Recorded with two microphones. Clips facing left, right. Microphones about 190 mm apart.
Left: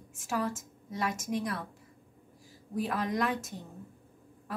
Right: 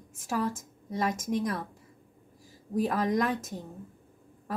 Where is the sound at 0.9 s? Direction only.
40° right (ahead or behind).